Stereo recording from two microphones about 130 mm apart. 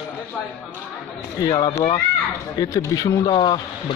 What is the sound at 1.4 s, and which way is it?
Speech, 30° left (ahead or behind).